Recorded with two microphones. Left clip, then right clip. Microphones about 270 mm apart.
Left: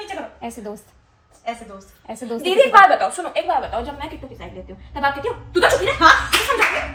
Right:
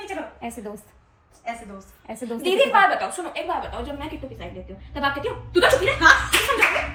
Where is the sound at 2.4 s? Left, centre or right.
Left.